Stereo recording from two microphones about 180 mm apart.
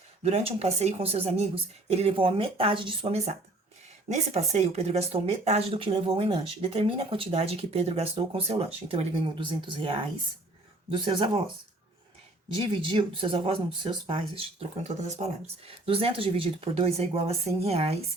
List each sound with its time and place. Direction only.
0.2 s speech: 35° right (ahead or behind)
12.5 s speech: 30° right (ahead or behind)